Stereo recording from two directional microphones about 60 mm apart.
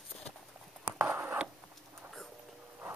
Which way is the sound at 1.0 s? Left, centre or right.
Right.